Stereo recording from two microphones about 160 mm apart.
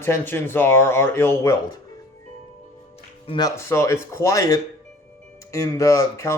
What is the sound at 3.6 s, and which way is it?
Speech, 15° left (ahead or behind).